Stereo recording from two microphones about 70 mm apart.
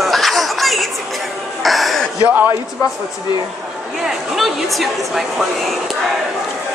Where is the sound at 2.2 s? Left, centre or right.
Right.